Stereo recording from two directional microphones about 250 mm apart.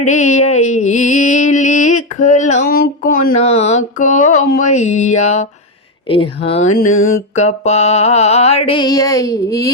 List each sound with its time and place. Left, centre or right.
0.0 s music: left
3.4 s speech: left
4.6 s mantra: left
6.8 s a sound: left
7.3 s mantra: left